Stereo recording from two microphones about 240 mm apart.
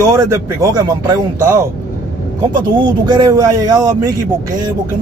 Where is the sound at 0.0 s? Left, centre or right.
Centre.